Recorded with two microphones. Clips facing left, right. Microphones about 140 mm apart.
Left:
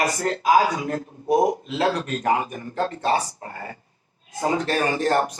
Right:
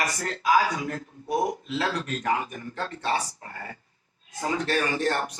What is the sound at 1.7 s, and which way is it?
Speech, 35° left (ahead or behind).